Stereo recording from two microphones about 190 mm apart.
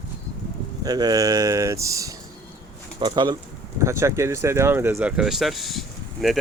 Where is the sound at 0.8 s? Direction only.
20° right (ahead or behind).